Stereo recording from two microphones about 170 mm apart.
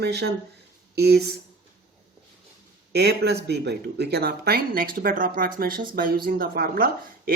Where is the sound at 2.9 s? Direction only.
75° right (ahead or behind).